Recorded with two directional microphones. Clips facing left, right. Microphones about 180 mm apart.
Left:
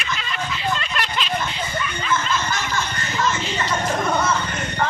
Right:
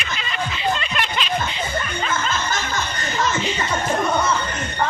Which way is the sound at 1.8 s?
45° right (ahead or behind).